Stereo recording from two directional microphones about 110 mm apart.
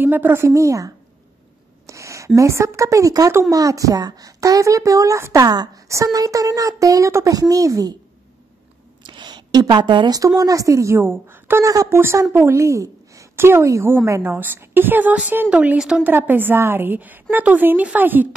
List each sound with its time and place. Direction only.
0.0 s a woman's voice: 20° right (ahead or behind)
9.0 s a woman's voice: 45° right (ahead or behind); by 11.6 s 20° right (ahead or behind)
11.6 s a woman's voice: 30° right (ahead or behind)